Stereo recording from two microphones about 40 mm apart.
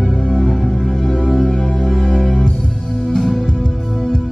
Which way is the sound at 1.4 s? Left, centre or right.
Left.